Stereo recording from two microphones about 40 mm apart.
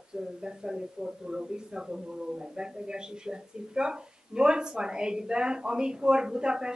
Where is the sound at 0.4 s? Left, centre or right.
Centre.